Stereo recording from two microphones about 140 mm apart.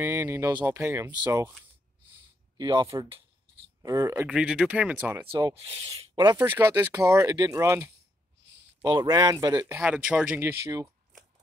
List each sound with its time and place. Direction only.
0.0 s speech: 15° right (ahead or behind)
0.5 s speech: 30° right (ahead or behind)
0.7 s speech: 20° right (ahead or behind)
2.5 s speech: 30° right (ahead or behind)
3.8 s speech: 20° right (ahead or behind)
4.3 s speech: 5° right (ahead or behind)
5.3 s speech: 30° right (ahead or behind)
6.3 s speech: 20° right (ahead or behind)
9.8 s speech: 10° right (ahead or behind)